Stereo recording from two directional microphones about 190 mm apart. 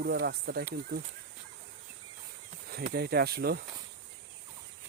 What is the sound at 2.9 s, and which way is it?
Speech, 55° right (ahead or behind).